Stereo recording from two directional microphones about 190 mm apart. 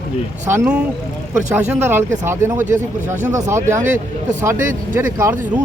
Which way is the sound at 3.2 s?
40° right (ahead or behind).